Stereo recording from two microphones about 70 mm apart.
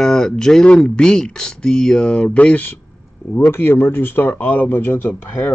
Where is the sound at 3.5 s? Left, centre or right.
Left.